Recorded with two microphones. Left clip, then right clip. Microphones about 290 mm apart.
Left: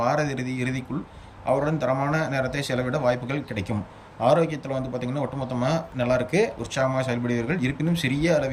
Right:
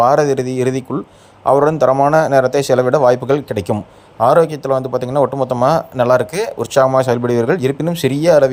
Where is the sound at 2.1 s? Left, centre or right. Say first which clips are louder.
Right 14 dB; centre.